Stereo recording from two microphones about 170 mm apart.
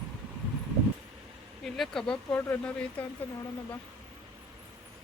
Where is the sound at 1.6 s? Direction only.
Centre (ahead or behind).